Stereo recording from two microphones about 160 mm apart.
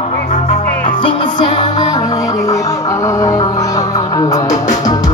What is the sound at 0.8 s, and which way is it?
Music, 30° left (ahead or behind).